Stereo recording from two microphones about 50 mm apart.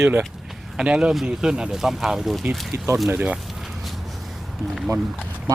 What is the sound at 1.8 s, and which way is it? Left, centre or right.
Speech, centre.